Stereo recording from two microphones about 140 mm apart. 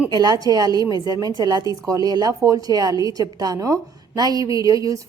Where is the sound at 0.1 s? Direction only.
30° right (ahead or behind).